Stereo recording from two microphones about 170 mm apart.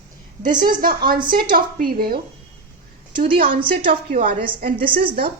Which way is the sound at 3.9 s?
50° right (ahead or behind).